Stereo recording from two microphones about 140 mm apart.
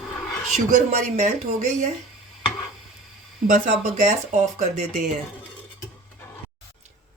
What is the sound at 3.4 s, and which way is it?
Speech, 60° right (ahead or behind).